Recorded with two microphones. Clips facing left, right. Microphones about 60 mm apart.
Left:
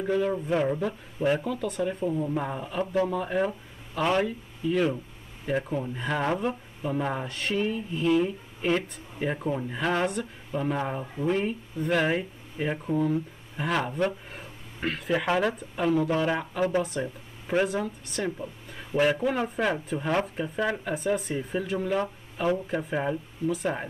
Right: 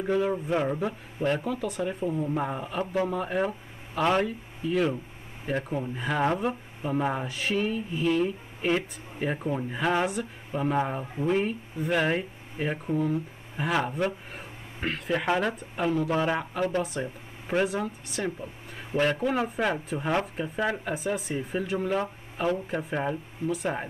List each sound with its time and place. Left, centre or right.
0.0 s speech: centre
1.2 s speech: centre
1.6 s speech: centre